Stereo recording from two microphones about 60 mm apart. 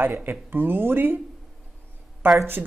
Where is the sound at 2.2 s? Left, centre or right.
Right.